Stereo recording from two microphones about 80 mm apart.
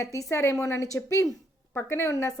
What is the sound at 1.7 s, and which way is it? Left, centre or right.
Speech, left.